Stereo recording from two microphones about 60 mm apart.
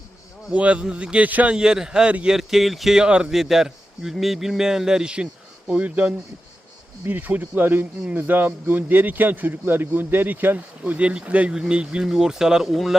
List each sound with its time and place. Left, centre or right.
0.5 s a man's voice: right
1.5 s speech: centre
3.3 s a man's voice: centre; by 10.9 s right
10.9 s a man's voice: centre